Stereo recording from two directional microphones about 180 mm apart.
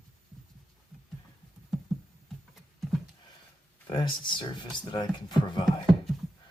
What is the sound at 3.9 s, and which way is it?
Speech, 25° left (ahead or behind).